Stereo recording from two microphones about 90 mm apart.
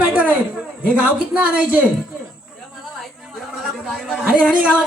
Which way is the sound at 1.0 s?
15° right (ahead or behind).